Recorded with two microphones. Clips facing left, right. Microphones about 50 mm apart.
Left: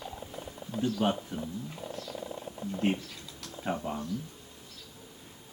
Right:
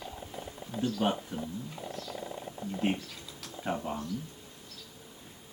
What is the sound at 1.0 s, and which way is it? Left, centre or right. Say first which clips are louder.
Speech: left 1 dB; centre.